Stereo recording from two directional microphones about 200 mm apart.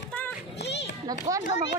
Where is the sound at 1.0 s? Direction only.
15° right (ahead or behind).